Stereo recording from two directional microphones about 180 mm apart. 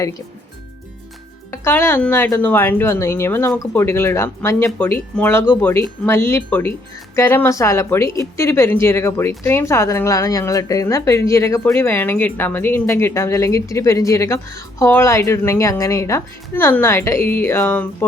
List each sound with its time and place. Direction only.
1.5 s speech: 15° left (ahead or behind)